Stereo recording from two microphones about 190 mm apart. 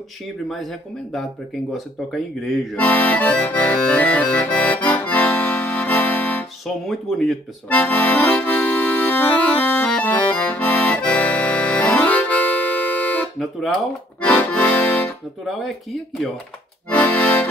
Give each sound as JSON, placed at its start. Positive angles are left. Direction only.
{"t": 0.5, "sound": "speech", "side_deg": 0}
{"t": 1.7, "sound": "accordion", "side_deg": 0}